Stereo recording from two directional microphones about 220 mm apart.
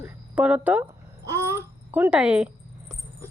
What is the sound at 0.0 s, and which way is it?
Babbling, 5° right (ahead or behind).